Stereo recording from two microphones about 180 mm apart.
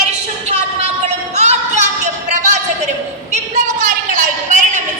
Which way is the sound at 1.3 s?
40° right (ahead or behind).